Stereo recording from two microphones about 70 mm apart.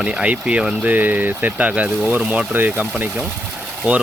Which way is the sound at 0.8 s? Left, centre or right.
Right.